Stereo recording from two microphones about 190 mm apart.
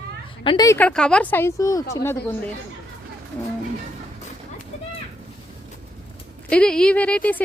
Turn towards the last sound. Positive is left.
turn(degrees=5)  # may be behind; listen again after turning